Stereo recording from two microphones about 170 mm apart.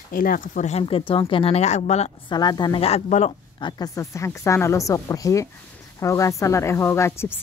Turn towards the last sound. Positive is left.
turn(degrees=15)  # may be behind; listen again after turning